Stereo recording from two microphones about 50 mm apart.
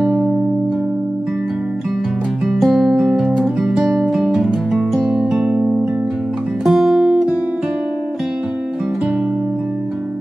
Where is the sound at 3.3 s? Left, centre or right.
Centre.